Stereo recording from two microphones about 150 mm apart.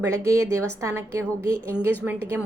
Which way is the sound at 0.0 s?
20° right (ahead or behind).